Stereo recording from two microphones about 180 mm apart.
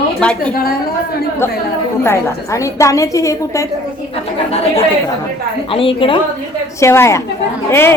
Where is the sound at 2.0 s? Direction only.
15° left (ahead or behind).